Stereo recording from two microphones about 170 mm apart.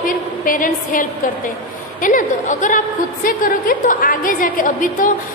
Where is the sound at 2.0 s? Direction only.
50° left (ahead or behind).